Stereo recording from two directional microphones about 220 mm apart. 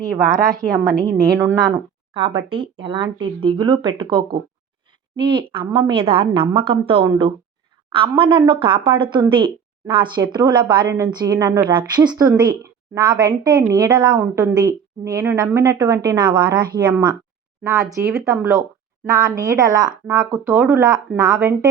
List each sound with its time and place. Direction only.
0.0 s a woman's voice: 15° right (ahead or behind)